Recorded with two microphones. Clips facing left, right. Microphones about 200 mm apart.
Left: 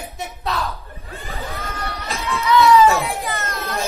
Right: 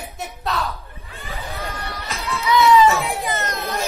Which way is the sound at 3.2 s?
15° right (ahead or behind).